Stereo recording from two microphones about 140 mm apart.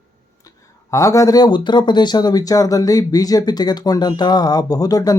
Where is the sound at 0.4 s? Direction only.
20° left (ahead or behind).